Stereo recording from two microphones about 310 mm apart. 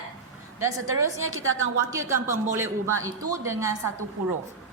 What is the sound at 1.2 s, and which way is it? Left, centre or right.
Speech, right.